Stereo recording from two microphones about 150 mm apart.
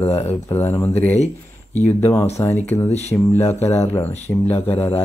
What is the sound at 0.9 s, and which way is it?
Speech, 45° left (ahead or behind).